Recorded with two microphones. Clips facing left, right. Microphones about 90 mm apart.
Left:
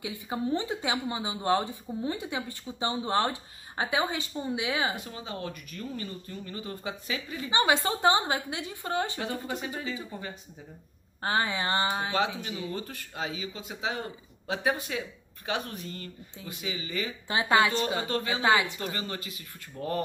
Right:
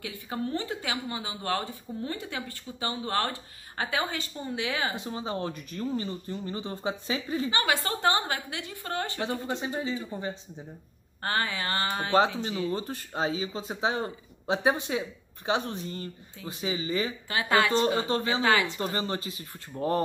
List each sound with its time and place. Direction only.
0.0 s speech: 15° left (ahead or behind)
4.9 s speech: 25° right (ahead or behind)
7.5 s speech: 20° left (ahead or behind)
9.2 s speech: 25° right (ahead or behind)
11.2 s speech: 20° left (ahead or behind)
12.7 s speech: 30° right (ahead or behind)
17.3 s speech: 20° left (ahead or behind)
17.7 s speech: 30° right (ahead or behind)
18.4 s speech: 20° left (ahead or behind)
18.8 s speech: 30° right (ahead or behind)